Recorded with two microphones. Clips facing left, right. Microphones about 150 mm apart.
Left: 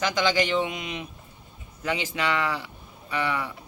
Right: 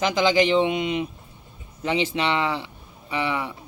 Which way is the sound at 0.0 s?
25° right (ahead or behind).